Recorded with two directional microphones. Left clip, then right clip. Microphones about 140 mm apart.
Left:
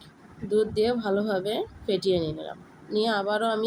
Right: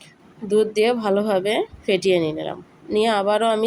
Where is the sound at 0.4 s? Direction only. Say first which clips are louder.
Right 6 dB; 20° right (ahead or behind).